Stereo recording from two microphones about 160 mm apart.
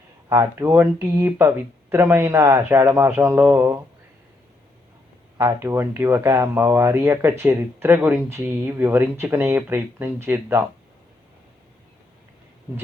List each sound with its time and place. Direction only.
0.3 s speech: 15° right (ahead or behind)
5.4 s speech: 15° right (ahead or behind)